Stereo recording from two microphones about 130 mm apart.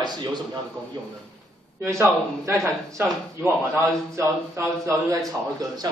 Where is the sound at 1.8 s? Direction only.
20° right (ahead or behind).